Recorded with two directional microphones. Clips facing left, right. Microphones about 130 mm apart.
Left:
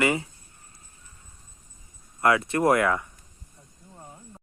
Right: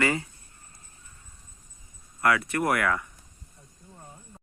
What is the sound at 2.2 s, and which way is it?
Speech, 25° left (ahead or behind).